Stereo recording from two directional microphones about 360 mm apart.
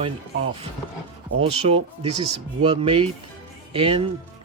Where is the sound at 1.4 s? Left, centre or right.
Centre.